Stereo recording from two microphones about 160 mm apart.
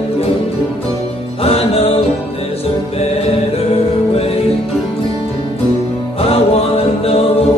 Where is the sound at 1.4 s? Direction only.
35° left (ahead or behind).